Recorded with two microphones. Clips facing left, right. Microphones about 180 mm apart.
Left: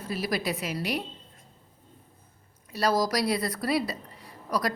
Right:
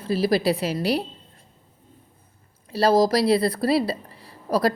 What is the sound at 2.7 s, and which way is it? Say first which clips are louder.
A woman's voice: right 7 dB; 30° right (ahead or behind).